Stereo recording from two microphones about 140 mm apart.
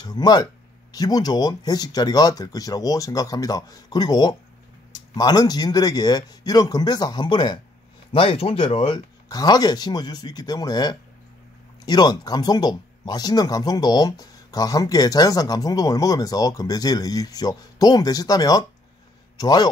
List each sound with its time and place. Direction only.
0.0 s speech: 30° left (ahead or behind)